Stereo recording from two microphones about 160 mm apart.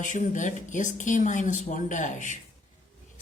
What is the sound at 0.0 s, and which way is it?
Speech, 55° left (ahead or behind).